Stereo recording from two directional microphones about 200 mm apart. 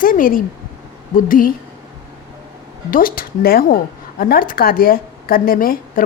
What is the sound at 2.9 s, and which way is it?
Speech, 45° left (ahead or behind).